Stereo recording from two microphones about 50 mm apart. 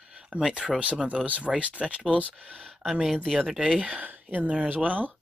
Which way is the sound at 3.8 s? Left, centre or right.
Right.